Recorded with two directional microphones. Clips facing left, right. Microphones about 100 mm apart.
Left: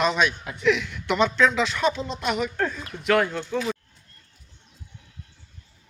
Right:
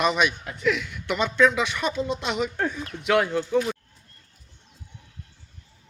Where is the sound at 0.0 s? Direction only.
10° right (ahead or behind).